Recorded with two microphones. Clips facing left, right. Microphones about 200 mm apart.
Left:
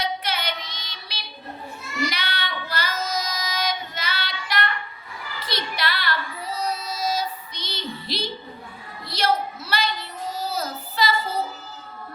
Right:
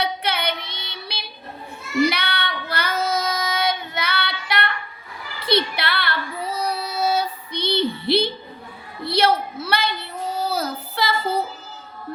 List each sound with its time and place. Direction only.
0.0 s child singing: 60° right (ahead or behind)
5.5 s female singing: 60° right (ahead or behind)
9.0 s child singing: 60° right (ahead or behind)